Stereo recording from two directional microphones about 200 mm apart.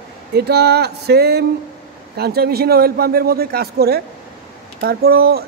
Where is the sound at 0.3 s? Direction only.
55° right (ahead or behind).